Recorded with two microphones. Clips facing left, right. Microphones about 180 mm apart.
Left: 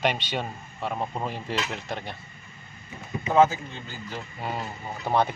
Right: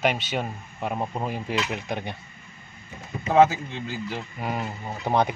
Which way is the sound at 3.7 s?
80° right.